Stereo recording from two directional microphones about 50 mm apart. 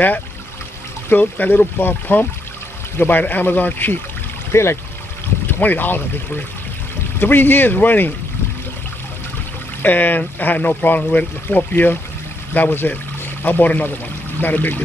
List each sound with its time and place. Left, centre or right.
1.1 s speech: left
4.5 s speech: left
5.5 s speech: left
9.8 s speech: left
11.0 s speech: left
11.4 s speech: left